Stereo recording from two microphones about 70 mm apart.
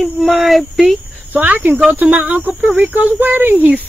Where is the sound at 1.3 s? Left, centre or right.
Right.